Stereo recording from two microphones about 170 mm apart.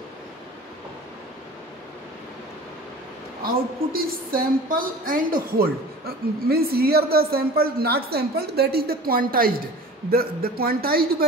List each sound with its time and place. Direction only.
3.4 s a woman's voice: 60° right (ahead or behind)